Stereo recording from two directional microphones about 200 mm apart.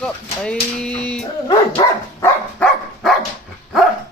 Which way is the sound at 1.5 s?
20° left (ahead or behind).